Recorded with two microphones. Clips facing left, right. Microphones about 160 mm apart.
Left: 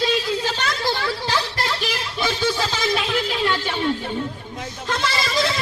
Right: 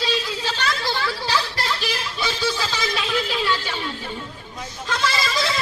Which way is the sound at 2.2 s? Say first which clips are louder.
Left 3 dB; 45° left (ahead or behind).